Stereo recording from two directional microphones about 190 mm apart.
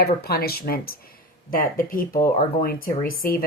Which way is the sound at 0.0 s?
55° left (ahead or behind).